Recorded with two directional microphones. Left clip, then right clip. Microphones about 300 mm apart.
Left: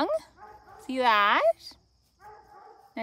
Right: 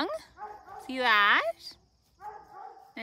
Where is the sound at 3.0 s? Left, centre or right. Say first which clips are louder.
Left 6 dB; centre.